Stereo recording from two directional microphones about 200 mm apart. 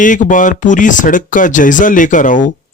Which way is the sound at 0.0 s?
40° left (ahead or behind).